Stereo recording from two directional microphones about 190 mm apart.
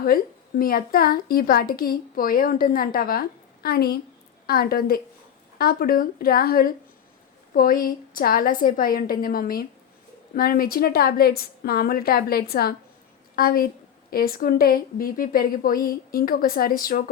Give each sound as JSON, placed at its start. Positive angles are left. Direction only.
{"t": 0.0, "sound": "speech", "side_deg": 50}